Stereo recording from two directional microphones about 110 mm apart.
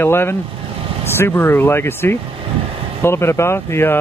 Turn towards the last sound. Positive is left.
turn(degrees=20)  # may be behind; listen again after turning